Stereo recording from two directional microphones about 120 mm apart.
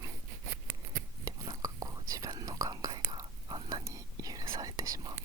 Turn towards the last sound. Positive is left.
turn(degrees=-30)  # may be behind; listen again after turning